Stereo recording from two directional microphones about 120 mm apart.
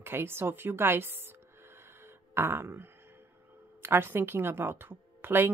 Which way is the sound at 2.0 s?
20° right (ahead or behind).